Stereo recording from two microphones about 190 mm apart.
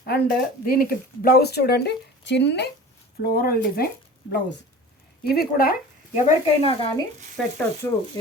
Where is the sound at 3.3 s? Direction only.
50° left (ahead or behind).